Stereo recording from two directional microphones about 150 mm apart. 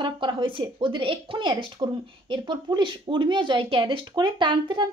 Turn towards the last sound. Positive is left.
turn(degrees=-30)  # may be behind; listen again after turning